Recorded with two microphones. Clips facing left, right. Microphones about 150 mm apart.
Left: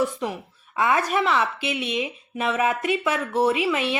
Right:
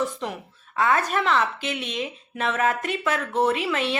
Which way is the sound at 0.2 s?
10° left (ahead or behind).